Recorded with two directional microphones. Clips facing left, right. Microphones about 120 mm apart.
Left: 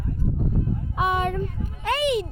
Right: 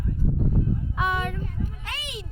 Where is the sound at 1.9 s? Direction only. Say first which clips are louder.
Left 15 dB; 55° left (ahead or behind).